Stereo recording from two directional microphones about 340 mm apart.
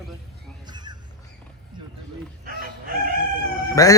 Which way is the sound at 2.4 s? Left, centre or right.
Right.